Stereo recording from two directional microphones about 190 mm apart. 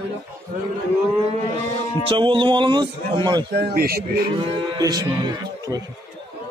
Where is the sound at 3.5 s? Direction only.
55° right (ahead or behind).